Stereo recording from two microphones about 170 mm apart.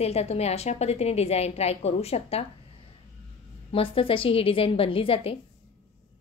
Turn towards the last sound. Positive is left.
turn(degrees=35)  # may be behind; listen again after turning